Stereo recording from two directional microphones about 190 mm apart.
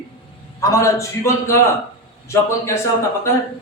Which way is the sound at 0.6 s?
15° left (ahead or behind).